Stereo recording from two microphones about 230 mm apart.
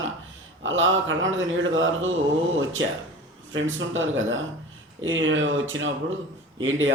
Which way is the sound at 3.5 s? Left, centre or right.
Right.